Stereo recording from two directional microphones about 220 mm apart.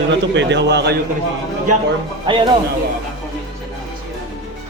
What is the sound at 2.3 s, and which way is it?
Speech, 20° right (ahead or behind).